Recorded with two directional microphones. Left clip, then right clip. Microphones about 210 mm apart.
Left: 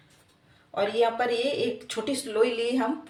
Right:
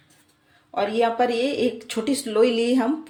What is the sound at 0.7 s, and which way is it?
A woman's voice, 40° right (ahead or behind).